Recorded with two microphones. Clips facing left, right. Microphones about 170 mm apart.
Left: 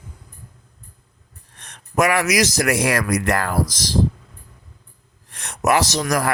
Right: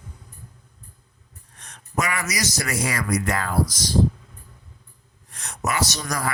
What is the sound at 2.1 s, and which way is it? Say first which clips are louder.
Speech: left 9 dB; 75° left (ahead or behind).